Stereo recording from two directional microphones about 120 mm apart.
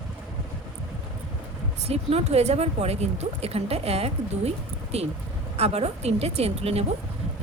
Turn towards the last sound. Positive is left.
turn(degrees=-55)  # may be behind; listen again after turning